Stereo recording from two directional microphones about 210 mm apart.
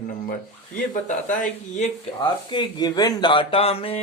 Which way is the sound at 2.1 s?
20° left (ahead or behind).